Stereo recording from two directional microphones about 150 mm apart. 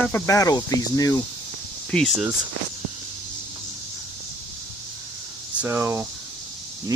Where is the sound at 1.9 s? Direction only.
5° left (ahead or behind).